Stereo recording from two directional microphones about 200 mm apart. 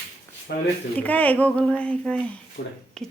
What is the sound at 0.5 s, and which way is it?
Speech, 55° left (ahead or behind).